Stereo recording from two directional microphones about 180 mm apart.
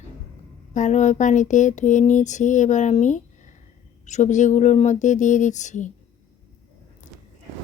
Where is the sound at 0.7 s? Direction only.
45° left (ahead or behind).